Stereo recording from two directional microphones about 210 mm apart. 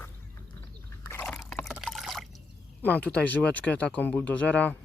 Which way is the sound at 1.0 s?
10° left (ahead or behind).